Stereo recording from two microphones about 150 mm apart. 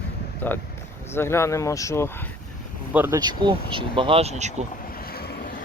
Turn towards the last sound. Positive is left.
turn(degrees=-45)  # may be behind; listen again after turning